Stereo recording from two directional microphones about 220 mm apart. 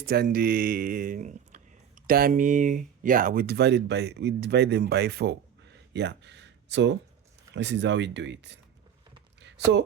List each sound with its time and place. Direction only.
0.1 s speech: 45° right (ahead or behind)